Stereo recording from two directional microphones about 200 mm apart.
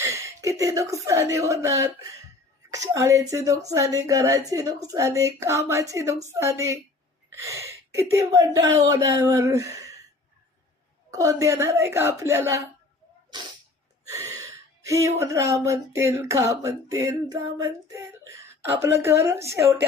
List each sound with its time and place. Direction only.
0.0 s speech: 15° right (ahead or behind)
11.1 s speech: 15° right (ahead or behind)
14.1 s speech: 15° right (ahead or behind)